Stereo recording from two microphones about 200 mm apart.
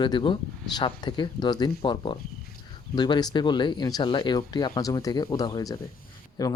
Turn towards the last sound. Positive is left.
turn(degrees=20)  # may be behind; listen again after turning